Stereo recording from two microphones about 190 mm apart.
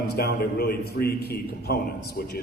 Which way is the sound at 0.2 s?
55° left (ahead or behind).